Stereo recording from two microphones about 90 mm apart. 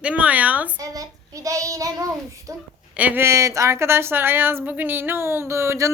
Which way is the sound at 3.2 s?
35° right (ahead or behind).